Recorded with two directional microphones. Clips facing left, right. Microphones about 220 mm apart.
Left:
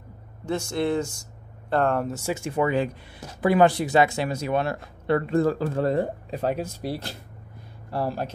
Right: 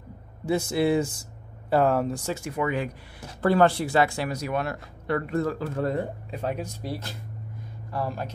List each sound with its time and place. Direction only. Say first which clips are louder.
0.5 s speech: right 2 dB; 5° right (ahead or behind)
2.3 s speech: left 7 dB; 30° left (ahead or behind)
3.3 s speech: left 1 dB; 15° left (ahead or behind); by 8.3 s 30° left (ahead or behind)